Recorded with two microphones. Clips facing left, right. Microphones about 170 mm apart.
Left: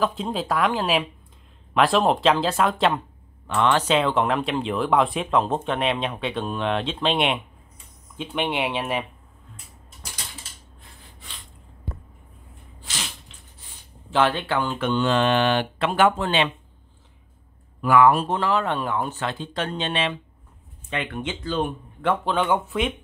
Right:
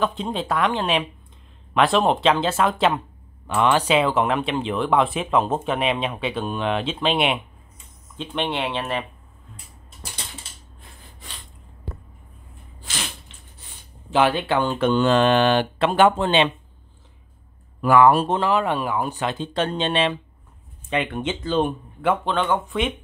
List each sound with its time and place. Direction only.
0.0 s speech: centre (ahead or behind)
8.2 s speech: 10° left (ahead or behind)
12.8 s a sound: 55° right (ahead or behind)
14.1 s speech: 15° right (ahead or behind)
14.6 s speech: 35° right (ahead or behind)
17.8 s speech: 35° right (ahead or behind)
18.4 s speech: 15° right (ahead or behind); by 20.2 s 35° right (ahead or behind)
20.9 s speech: 20° right (ahead or behind)
22.2 s speech: 10° left (ahead or behind)